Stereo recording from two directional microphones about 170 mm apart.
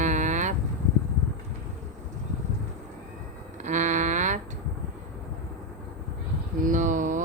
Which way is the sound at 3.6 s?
45° right (ahead or behind).